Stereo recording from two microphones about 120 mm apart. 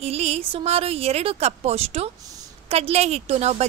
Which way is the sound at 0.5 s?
55° right (ahead or behind).